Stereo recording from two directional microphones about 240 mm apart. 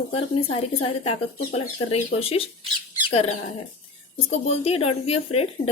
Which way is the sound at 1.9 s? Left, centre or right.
Left.